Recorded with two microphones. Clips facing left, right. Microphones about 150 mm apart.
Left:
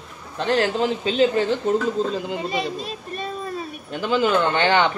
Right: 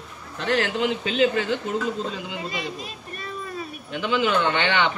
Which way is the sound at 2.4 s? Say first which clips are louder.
Left 6 dB; 25° left (ahead or behind).